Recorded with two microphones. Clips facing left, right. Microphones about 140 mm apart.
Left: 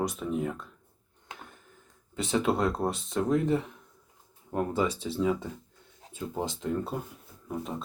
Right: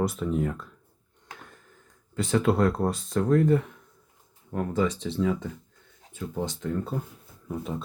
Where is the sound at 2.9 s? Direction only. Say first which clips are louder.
Right 4 dB; 15° left (ahead or behind).